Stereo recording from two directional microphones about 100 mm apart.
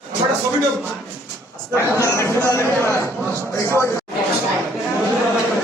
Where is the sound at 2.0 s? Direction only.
25° left (ahead or behind).